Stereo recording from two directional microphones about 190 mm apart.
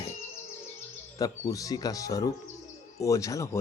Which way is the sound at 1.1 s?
20° left (ahead or behind).